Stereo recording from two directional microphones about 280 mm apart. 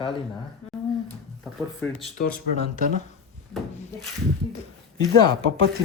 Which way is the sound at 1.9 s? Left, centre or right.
Left.